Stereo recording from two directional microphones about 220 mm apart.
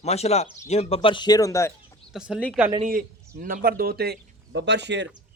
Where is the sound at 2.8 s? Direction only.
40° right (ahead or behind).